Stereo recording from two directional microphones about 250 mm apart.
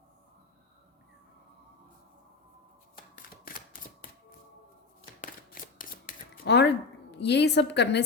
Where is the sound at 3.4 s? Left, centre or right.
Left.